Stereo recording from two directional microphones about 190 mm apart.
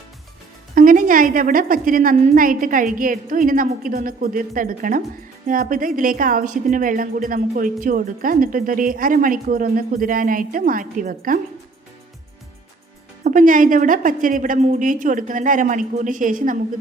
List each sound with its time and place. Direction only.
0.8 s a woman's voice: 45° right (ahead or behind)
13.2 s a woman's voice: 45° right (ahead or behind)